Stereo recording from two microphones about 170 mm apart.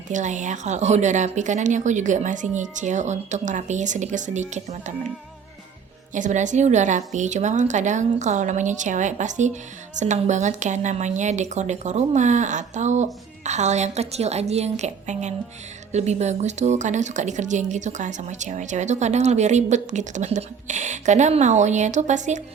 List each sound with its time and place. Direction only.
0.1 s speech: 45° right (ahead or behind)
6.1 s speech: 45° right (ahead or behind)